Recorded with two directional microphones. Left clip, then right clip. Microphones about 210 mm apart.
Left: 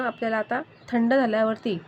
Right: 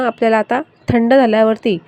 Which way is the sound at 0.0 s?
35° right (ahead or behind).